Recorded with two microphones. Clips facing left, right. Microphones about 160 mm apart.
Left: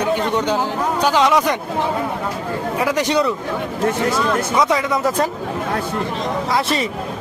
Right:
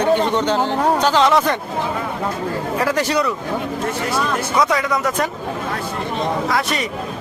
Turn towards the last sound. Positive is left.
turn(degrees=30)  # may be behind; listen again after turning